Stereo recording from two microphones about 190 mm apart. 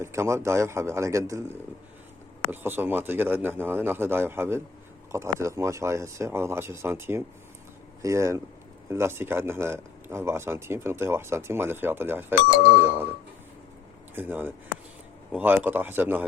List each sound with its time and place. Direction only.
0.0 s speech: 15° right (ahead or behind)
14.2 s speech: 10° right (ahead or behind)